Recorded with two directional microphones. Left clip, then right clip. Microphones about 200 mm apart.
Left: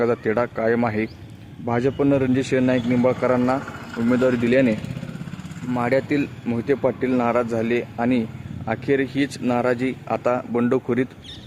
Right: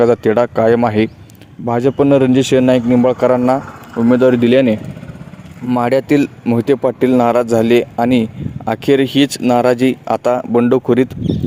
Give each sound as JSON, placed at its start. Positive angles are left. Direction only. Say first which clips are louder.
{"t": 0.0, "sound": "speech", "louder": "right 9 dB", "side_deg": -45}